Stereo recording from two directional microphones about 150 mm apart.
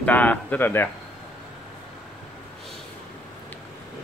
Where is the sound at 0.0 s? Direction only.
10° left (ahead or behind).